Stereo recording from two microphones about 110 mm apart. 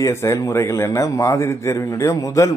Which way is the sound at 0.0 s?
25° left (ahead or behind).